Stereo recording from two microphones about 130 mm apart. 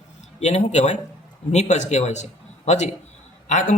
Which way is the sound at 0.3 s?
60° left (ahead or behind).